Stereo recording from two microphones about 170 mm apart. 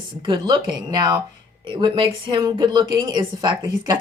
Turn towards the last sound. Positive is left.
turn(degrees=-25)  # may be behind; listen again after turning